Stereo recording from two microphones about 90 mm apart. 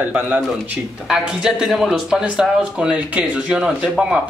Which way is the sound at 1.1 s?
5° right (ahead or behind).